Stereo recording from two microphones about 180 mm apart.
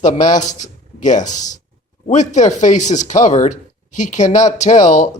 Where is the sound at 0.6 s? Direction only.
45° left (ahead or behind).